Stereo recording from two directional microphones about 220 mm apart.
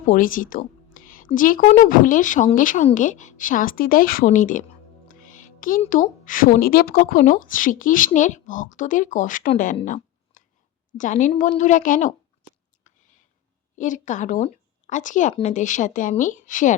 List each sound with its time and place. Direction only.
0.1 s a woman's voice: 40° left (ahead or behind)
9.7 s a sound: 35° left (ahead or behind)
10.9 s speech: 35° left (ahead or behind)
12.9 s whispering: 35° left (ahead or behind)
13.7 s speech: 35° left (ahead or behind)